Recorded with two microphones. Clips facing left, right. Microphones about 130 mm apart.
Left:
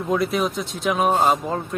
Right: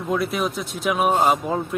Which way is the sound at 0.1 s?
Centre (ahead or behind).